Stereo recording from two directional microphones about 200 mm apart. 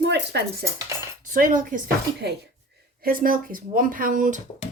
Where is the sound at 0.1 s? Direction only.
55° right (ahead or behind).